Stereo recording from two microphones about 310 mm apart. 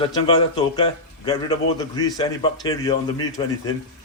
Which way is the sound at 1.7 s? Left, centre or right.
Centre.